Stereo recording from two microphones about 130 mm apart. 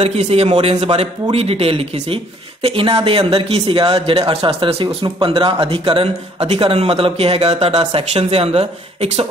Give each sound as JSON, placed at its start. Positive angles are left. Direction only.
{"t": 0.0, "sound": "speech", "side_deg": -55}